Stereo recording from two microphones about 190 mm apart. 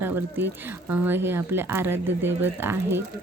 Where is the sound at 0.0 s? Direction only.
10° right (ahead or behind).